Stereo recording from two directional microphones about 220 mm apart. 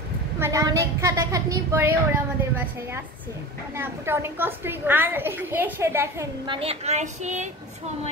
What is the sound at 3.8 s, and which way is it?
A woman's voice, 10° right (ahead or behind).